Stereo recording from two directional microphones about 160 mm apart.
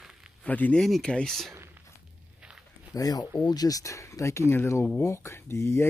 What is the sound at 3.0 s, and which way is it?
Speech, 20° left (ahead or behind).